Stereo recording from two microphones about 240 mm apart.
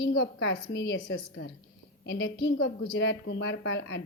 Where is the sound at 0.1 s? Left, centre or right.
Left.